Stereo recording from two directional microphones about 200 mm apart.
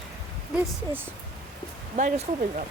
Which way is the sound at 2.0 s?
40° right (ahead or behind).